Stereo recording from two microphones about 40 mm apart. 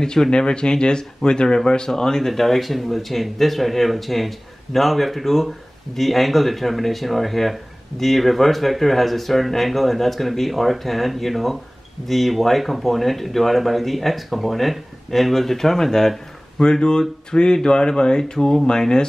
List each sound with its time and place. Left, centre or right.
0.0 s speech: centre